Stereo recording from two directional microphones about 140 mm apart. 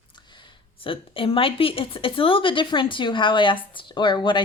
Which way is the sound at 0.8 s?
40° left (ahead or behind).